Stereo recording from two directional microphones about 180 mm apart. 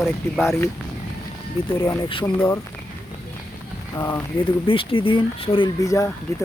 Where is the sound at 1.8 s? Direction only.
15° left (ahead or behind).